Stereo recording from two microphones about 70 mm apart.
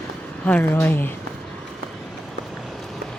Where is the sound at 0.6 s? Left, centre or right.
Left.